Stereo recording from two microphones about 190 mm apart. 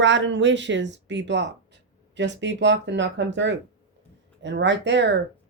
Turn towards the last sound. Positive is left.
turn(degrees=-70)  # may be behind; listen again after turning